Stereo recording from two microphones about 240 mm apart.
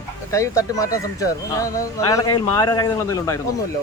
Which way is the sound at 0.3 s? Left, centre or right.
Centre.